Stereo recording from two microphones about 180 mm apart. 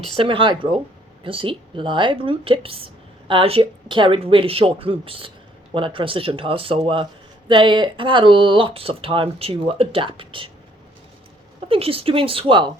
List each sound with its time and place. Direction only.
0.2 s speech: 30° right (ahead or behind)
11.7 s speech: 30° right (ahead or behind)